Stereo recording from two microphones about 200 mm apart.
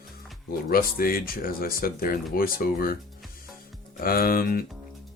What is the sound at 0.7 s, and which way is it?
Speech, 50° left (ahead or behind).